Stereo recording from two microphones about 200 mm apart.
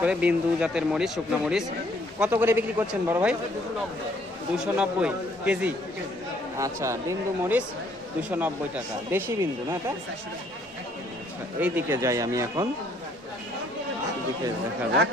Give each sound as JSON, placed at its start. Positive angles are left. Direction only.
{"t": 0.0, "sound": "speech", "side_deg": -5}
{"t": 4.5, "sound": "speech", "side_deg": -5}
{"t": 11.6, "sound": "speech", "side_deg": -15}